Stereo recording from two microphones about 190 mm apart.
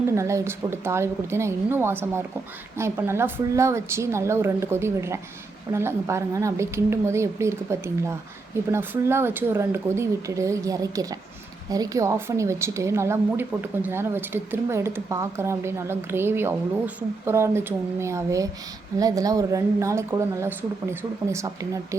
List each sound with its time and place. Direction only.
0.1 s a woman's voice: 15° right (ahead or behind)